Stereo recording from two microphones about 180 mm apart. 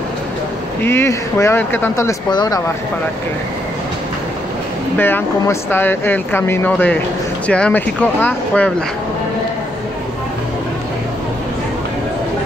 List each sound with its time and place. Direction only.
0.8 s speech: 15° left (ahead or behind)
4.9 s speech: 10° left (ahead or behind)